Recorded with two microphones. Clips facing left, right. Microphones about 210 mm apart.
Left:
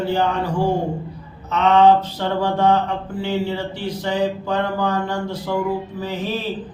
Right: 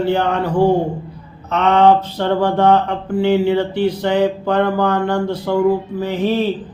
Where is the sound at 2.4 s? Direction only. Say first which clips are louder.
Right 3 dB; 60° right (ahead or behind).